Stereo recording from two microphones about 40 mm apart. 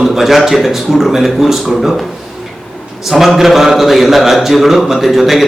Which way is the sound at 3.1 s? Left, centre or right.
Centre.